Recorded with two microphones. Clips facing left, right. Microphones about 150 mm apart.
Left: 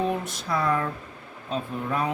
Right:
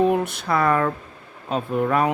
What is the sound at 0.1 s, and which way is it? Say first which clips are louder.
Speech: right 7 dB; 65° right (ahead or behind).